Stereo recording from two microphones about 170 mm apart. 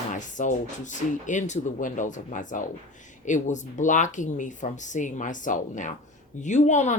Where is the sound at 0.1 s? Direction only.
45° left (ahead or behind).